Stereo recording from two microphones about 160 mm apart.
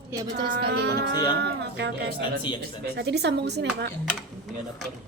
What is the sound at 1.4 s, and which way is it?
Speech, 90° right.